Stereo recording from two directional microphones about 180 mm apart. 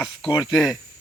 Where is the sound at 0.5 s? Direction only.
Centre (ahead or behind).